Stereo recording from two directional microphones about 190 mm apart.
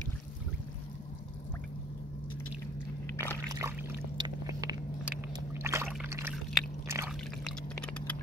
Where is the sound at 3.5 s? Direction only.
15° right (ahead or behind).